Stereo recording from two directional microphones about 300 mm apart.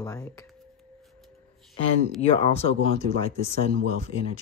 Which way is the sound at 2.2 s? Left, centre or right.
Centre.